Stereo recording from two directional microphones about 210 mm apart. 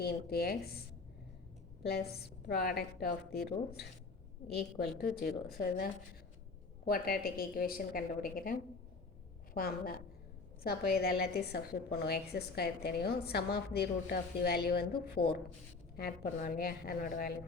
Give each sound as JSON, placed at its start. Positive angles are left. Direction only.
{"t": 0.0, "sound": "a woman's voice", "side_deg": 50}
{"t": 1.8, "sound": "a woman's voice", "side_deg": 50}
{"t": 9.6, "sound": "a woman's voice", "side_deg": 45}